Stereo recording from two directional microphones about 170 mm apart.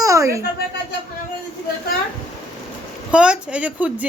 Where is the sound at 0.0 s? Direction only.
20° right (ahead or behind).